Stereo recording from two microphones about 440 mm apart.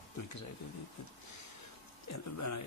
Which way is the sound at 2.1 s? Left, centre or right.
Left.